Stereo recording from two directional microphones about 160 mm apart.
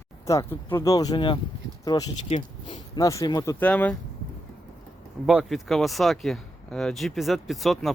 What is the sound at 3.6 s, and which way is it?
Speech, 10° left (ahead or behind).